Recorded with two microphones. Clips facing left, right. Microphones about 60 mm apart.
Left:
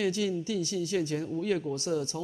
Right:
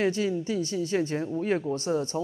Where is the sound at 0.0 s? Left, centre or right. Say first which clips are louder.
Right 3 dB; right.